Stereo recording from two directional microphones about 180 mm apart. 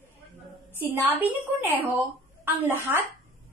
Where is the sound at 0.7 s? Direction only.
10° right (ahead or behind).